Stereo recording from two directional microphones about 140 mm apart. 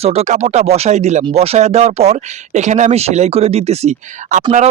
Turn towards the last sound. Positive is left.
turn(degrees=-50)  # may be behind; listen again after turning